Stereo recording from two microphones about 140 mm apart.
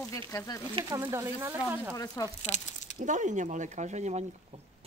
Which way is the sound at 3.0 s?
60° right (ahead or behind).